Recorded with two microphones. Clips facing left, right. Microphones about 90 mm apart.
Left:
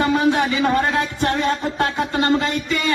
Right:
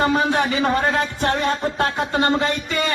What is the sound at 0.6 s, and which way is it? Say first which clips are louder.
Speech: left 1 dB; 25° right (ahead or behind).